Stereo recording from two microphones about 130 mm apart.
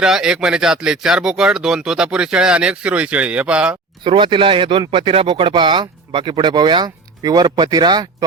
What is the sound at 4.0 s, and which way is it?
A man's voice, 40° right (ahead or behind).